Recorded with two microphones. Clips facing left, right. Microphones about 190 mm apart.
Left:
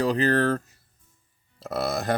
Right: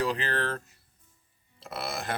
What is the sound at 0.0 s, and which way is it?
Speech, 40° left (ahead or behind).